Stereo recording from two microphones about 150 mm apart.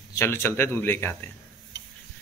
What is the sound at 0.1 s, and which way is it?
Speech, 15° left (ahead or behind).